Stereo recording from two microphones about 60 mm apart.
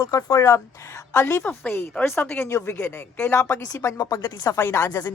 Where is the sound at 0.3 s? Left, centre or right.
Left.